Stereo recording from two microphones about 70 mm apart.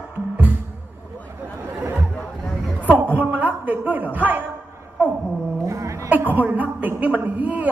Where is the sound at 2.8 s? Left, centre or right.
Right.